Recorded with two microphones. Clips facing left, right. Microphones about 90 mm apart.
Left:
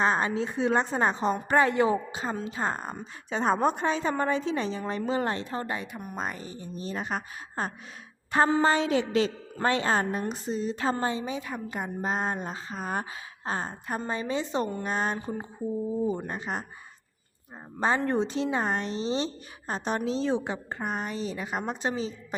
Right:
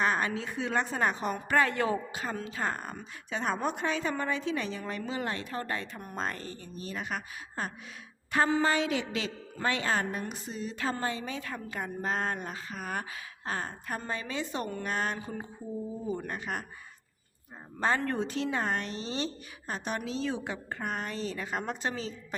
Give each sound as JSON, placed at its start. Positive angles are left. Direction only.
{"t": 0.0, "sound": "a woman's voice", "side_deg": 25}
{"t": 17.7, "sound": "a woman's voice", "side_deg": 20}